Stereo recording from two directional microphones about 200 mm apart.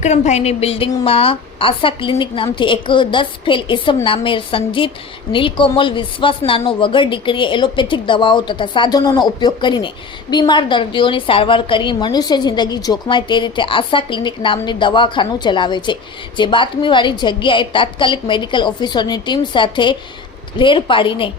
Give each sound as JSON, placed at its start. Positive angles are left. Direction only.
{"t": 0.0, "sound": "speech", "side_deg": 35}